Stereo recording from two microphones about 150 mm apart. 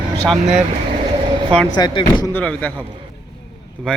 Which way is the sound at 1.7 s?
30° left (ahead or behind).